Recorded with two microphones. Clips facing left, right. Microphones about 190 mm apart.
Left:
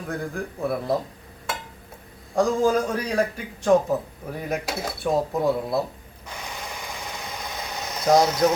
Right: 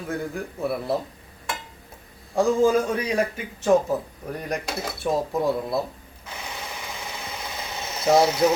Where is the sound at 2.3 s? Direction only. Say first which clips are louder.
Right 1 dB; 5° right (ahead or behind).